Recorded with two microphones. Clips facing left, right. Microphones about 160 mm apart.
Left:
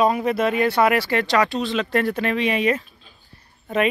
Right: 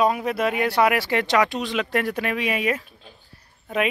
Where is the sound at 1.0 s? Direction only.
20° right (ahead or behind).